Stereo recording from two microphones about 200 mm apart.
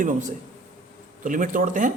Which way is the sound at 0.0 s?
40° right (ahead or behind).